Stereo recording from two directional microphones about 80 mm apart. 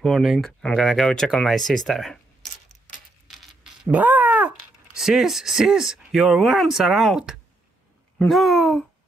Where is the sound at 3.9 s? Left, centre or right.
Right.